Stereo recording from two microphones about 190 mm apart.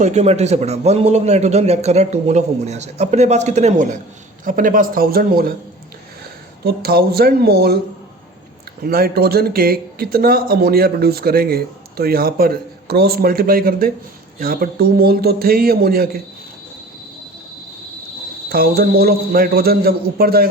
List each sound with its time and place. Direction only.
0.0 s a man's voice: 35° right (ahead or behind); by 5.5 s 50° right (ahead or behind)
6.7 s speech: 55° right (ahead or behind)
8.8 s speech: 50° right (ahead or behind)
18.4 s speech: 55° right (ahead or behind)